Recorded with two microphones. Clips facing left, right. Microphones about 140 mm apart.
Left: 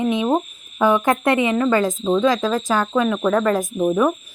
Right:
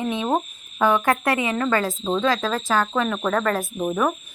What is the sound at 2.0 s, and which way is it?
Speech, 5° left (ahead or behind).